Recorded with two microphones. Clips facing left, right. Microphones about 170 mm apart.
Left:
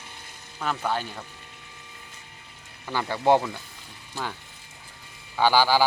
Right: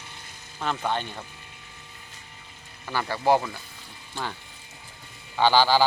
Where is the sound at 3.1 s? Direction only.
20° left (ahead or behind).